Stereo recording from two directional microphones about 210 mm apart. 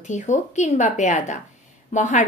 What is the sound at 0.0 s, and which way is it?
A woman's voice, 35° left (ahead or behind).